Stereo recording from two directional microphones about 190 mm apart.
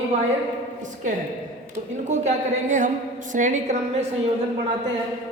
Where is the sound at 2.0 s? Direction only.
40° right (ahead or behind).